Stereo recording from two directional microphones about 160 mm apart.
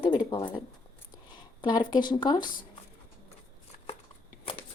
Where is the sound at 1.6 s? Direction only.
25° left (ahead or behind).